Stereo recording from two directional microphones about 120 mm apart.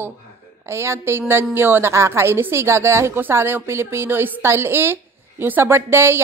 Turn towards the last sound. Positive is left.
turn(degrees=-20)  # may be behind; listen again after turning